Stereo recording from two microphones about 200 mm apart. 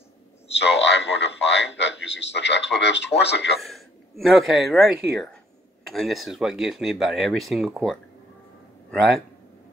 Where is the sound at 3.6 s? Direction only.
Centre (ahead or behind).